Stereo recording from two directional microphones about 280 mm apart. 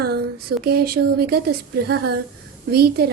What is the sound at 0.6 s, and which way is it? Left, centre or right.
Speech, right.